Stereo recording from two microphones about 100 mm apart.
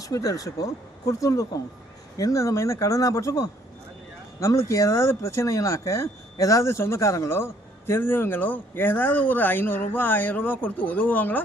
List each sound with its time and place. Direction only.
0.0 s speech: 35° left (ahead or behind); by 11.3 s 15° left (ahead or behind)